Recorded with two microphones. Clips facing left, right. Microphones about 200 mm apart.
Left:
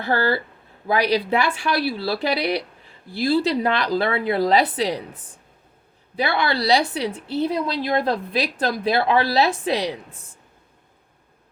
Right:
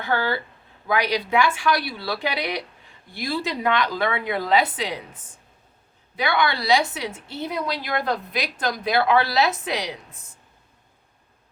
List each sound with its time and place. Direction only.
0.0 s a woman's voice: 35° left (ahead or behind)